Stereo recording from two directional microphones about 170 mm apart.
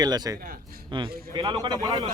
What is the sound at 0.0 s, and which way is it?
A man's voice, 25° right (ahead or behind).